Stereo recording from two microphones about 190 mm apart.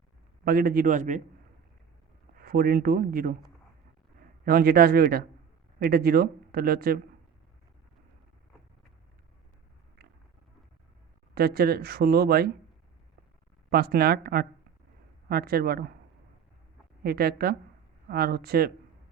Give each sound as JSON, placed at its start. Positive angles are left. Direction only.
{"t": 0.4, "sound": "speech", "side_deg": -50}
{"t": 2.3, "sound": "speech", "side_deg": -50}
{"t": 4.4, "sound": "speech", "side_deg": -50}
{"t": 11.3, "sound": "speech", "side_deg": -55}
{"t": 13.7, "sound": "speech", "side_deg": -55}
{"t": 17.0, "sound": "speech", "side_deg": -55}